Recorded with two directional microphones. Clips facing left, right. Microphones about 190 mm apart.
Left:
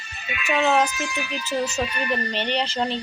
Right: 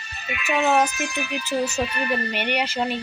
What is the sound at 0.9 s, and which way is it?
Speech, 55° right (ahead or behind).